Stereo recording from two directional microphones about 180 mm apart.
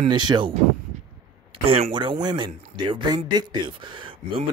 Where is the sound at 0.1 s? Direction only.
25° right (ahead or behind).